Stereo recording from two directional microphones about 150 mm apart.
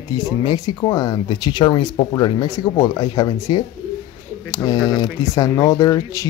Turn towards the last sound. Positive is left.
turn(degrees=25)  # may be behind; listen again after turning